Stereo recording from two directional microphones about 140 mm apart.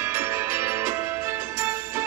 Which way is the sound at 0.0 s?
15° right (ahead or behind).